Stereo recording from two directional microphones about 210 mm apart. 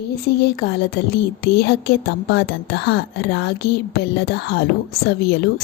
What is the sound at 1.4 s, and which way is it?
A woman's voice, 50° left (ahead or behind).